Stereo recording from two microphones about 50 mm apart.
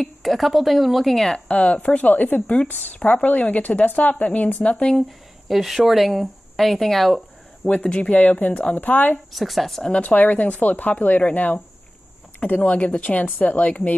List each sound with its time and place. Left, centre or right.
0.2 s speech: centre
1.5 s speech: left
5.5 s speech: centre
7.8 s speech: centre
8.1 s speech: left
9.3 s speech: centre
9.8 s speech: left